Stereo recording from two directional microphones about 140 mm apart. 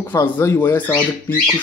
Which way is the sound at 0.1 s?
15° left (ahead or behind).